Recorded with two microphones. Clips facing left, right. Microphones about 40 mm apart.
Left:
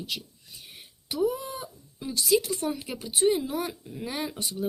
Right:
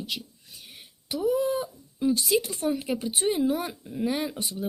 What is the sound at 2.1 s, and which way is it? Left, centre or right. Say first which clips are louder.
Speech: left 1 dB; right.